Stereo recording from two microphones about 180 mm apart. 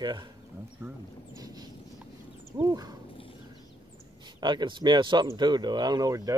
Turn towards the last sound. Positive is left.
turn(degrees=-20)  # may be behind; listen again after turning